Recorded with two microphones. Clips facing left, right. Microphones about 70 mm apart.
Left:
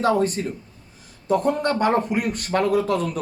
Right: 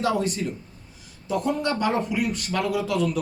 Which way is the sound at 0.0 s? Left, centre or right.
Left.